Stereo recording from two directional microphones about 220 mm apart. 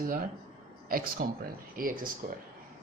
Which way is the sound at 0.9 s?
40° right (ahead or behind).